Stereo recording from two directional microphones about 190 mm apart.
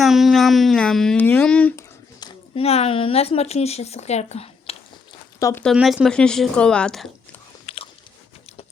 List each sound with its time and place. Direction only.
0.0 s speech: centre (ahead or behind)
2.2 s speech: 30° left (ahead or behind)
5.4 s speech: 15° left (ahead or behind)
5.6 s speech: centre (ahead or behind)
7.7 s biting: 30° left (ahead or behind)